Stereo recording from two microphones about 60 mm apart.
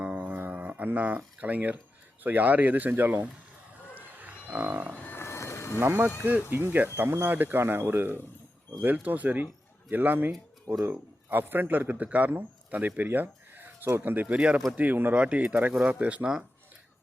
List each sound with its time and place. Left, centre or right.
0.0 s music: right
2.2 s speech: right
3.9 s livestock: right
5.1 s a sound: left
6.5 s speech: right
14.3 s speech: centre